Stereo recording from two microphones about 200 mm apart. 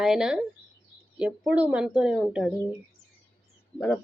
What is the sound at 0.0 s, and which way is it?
Speech, 5° right (ahead or behind).